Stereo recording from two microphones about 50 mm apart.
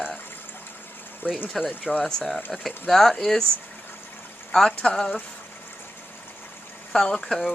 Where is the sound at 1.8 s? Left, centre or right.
Centre.